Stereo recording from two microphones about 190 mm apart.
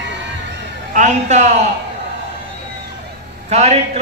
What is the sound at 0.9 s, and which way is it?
Speech, 40° right (ahead or behind).